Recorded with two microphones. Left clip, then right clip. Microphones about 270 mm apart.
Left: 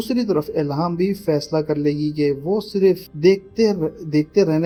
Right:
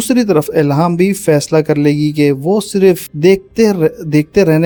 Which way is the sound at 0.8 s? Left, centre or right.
Right.